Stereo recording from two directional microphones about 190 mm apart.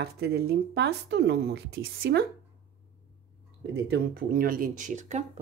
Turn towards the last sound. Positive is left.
turn(degrees=-40)  # may be behind; listen again after turning